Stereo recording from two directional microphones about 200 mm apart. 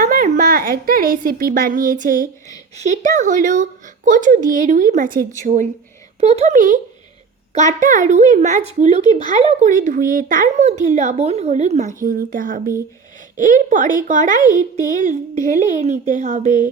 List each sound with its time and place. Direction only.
0.0 s a woman's voice: 40° right (ahead or behind)